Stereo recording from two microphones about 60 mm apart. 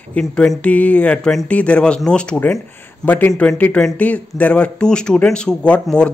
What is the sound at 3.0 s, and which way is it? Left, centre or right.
A man's voice, left.